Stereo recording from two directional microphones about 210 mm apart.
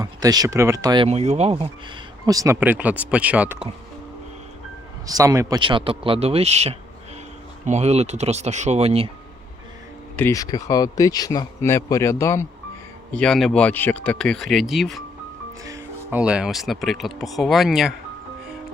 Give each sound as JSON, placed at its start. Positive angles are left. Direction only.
{"t": 0.0, "sound": "speech", "side_deg": -15}
{"t": 2.2, "sound": "speech", "side_deg": -15}
{"t": 5.0, "sound": "speech", "side_deg": -15}
{"t": 10.2, "sound": "speech", "side_deg": 15}
{"t": 13.1, "sound": "speech", "side_deg": 5}
{"t": 15.6, "sound": "speech", "side_deg": -10}